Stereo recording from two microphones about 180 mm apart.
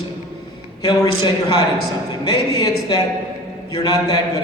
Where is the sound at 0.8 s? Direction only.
25° left (ahead or behind).